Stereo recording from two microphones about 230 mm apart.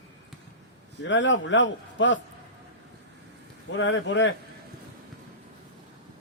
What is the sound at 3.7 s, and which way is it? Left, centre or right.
Speech, left.